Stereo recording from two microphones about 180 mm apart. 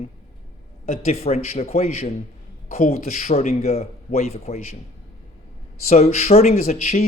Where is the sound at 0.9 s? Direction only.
35° left (ahead or behind).